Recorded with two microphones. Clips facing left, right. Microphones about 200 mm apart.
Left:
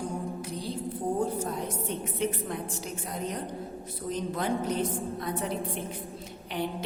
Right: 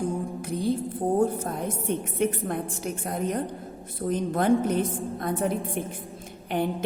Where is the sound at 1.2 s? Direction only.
55° right (ahead or behind).